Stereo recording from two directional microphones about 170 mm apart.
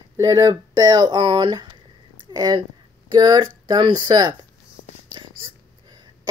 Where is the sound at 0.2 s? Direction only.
20° right (ahead or behind).